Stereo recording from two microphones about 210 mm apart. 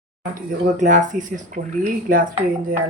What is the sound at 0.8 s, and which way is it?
Speech, 35° right (ahead or behind).